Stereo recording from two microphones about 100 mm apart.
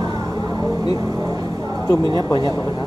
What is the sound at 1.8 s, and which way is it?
Speech, 40° left (ahead or behind).